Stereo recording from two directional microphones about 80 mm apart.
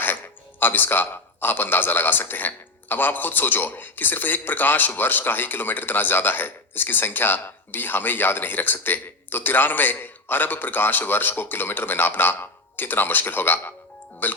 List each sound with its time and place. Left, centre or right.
0.6 s a man's voice: left